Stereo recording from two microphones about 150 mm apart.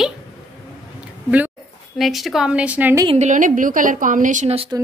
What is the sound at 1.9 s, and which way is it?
A woman's voice, centre (ahead or behind).